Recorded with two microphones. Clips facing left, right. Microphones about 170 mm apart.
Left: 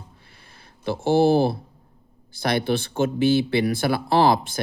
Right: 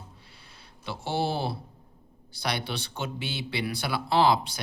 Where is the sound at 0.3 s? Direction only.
50° left (ahead or behind).